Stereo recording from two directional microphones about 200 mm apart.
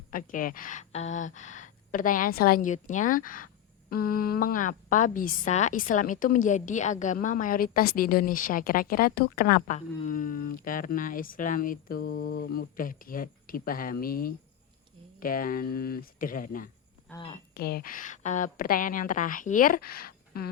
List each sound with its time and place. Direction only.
0.1 s speech: 40° left (ahead or behind)
17.2 s speech: 30° left (ahead or behind)
17.5 s speech: 50° left (ahead or behind)